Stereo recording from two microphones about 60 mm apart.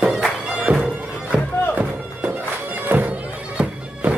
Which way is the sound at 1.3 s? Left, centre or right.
Right.